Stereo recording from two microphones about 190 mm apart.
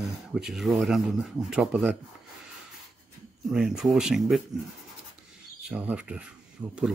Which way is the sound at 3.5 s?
5° right (ahead or behind).